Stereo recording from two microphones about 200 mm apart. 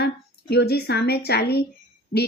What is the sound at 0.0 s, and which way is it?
A woman's voice, 55° left (ahead or behind).